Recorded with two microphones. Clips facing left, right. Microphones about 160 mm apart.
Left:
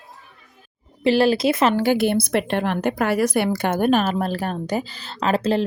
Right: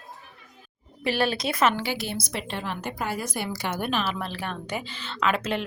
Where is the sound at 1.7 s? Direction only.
50° left (ahead or behind).